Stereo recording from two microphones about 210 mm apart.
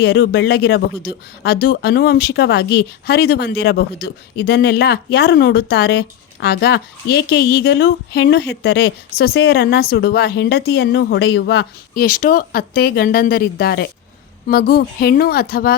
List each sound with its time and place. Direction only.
0.0 s speech: 50° left (ahead or behind)